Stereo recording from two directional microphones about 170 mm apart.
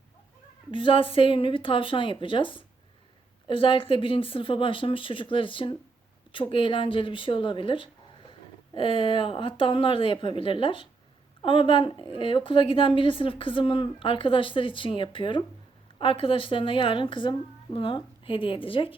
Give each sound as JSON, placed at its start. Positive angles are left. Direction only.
{"t": 0.7, "sound": "a woman's voice", "side_deg": 30}